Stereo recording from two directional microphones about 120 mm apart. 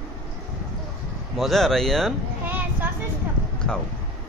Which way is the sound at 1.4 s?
Centre (ahead or behind).